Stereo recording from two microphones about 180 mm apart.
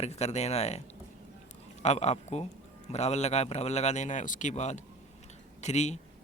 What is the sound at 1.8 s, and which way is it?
Speech, 40° left (ahead or behind).